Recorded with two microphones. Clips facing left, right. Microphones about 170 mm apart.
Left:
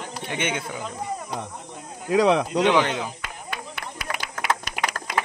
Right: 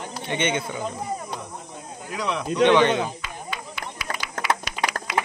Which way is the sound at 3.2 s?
55° left (ahead or behind).